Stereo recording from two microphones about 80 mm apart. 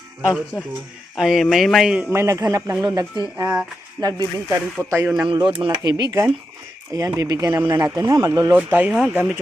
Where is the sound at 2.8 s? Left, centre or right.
Right.